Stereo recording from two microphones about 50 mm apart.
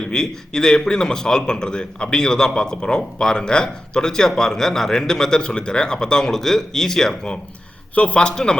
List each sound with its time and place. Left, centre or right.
0.1 s a man's voice: centre
7.9 s a man's voice: left
8.2 s a man's voice: centre